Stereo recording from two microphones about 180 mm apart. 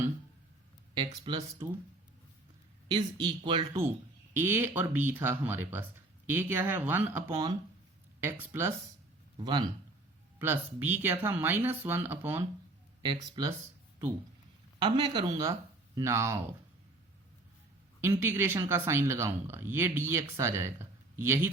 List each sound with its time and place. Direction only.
0.9 s speech: 25° right (ahead or behind)
2.9 s speech: 25° right (ahead or behind)
4.4 s speech: 10° right (ahead or behind)
9.4 s speech: 25° right (ahead or behind)
10.3 s speech: 10° right (ahead or behind)
13.0 s speech: 25° right (ahead or behind)
14.8 s speech: 25° right (ahead or behind)
18.0 s speech: 10° right (ahead or behind)